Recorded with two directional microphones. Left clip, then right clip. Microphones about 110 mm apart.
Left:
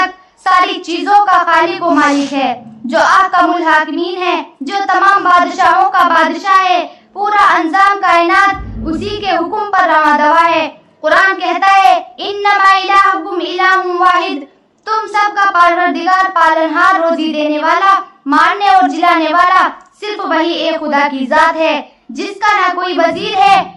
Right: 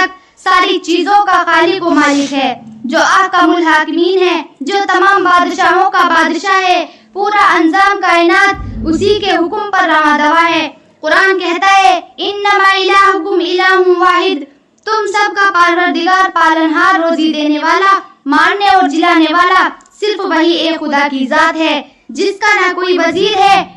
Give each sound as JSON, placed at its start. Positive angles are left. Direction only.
{"t": 0.4, "sound": "child singing", "side_deg": -30}
{"t": 1.3, "sound": "child singing", "side_deg": -35}
{"t": 2.8, "sound": "a child's voice", "side_deg": -20}
{"t": 6.0, "sound": "child singing", "side_deg": -40}
{"t": 7.2, "sound": "child singing", "side_deg": -25}
{"t": 9.5, "sound": "child singing", "side_deg": -20}
{"t": 13.8, "sound": "a child's voice", "side_deg": -30}
{"t": 14.8, "sound": "child singing", "side_deg": -40}